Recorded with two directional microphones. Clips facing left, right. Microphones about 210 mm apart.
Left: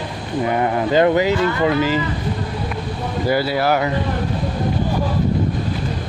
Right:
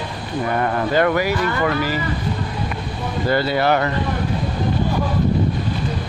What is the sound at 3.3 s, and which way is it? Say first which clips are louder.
Speech: even; 5° left (ahead or behind).